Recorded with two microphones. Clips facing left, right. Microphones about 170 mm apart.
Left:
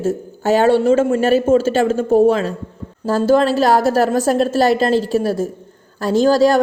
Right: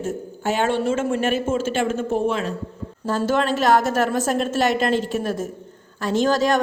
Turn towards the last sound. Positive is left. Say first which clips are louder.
# left 6 dB
turn(degrees=35)  # may be behind; listen again after turning